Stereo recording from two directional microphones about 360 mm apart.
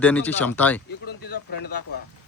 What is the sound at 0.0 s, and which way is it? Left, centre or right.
Speech, centre.